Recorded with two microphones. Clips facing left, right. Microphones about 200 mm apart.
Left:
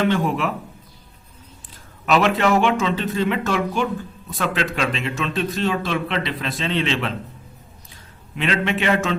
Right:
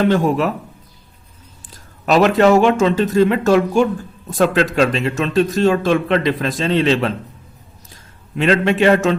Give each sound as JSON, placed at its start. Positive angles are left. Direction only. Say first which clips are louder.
{"t": 0.0, "sound": "speech", "louder": "right 5 dB", "side_deg": -40}
{"t": 1.7, "sound": "speech", "louder": "right 4 dB", "side_deg": -40}
{"t": 8.4, "sound": "speech", "louder": "right 7 dB", "side_deg": -40}